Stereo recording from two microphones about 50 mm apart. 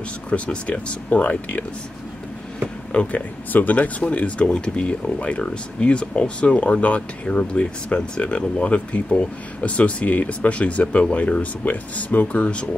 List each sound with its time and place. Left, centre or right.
0.3 s speech: left
2.9 s speech: left